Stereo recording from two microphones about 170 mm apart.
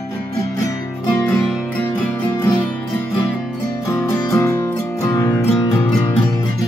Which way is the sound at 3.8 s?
15° left (ahead or behind).